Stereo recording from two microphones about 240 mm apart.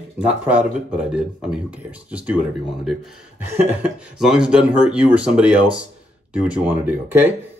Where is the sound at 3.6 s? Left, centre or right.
Centre.